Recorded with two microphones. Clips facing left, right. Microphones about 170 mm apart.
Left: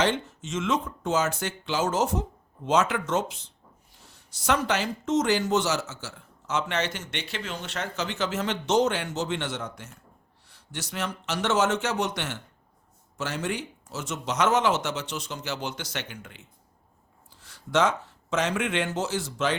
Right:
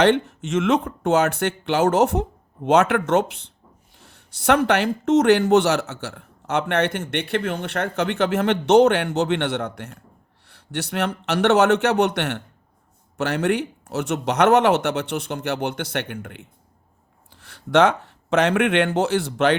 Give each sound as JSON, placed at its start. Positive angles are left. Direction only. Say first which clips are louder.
{"t": 0.0, "sound": "speech", "louder": "right 8 dB", "side_deg": -65}